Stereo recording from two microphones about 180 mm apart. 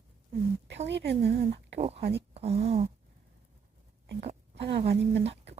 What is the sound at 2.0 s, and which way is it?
Speech, 65° right (ahead or behind).